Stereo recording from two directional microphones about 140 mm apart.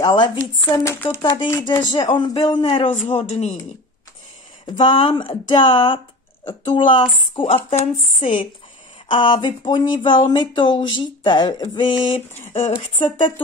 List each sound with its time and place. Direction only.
0.0 s speech: 30° left (ahead or behind)
0.7 s speech: 20° left (ahead or behind)
1.2 s speech: 35° left (ahead or behind); by 3.5 s 50° left (ahead or behind)
4.7 s speech: 40° left (ahead or behind)